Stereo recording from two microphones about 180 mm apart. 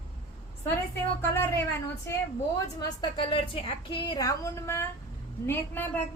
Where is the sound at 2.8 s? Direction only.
25° left (ahead or behind).